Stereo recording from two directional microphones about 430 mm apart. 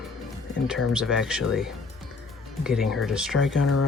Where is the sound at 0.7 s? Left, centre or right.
Centre.